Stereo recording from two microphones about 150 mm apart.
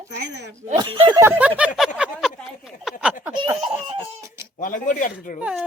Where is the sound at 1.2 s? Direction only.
10° right (ahead or behind).